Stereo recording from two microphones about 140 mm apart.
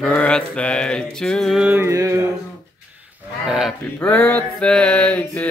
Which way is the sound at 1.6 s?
15° right (ahead or behind).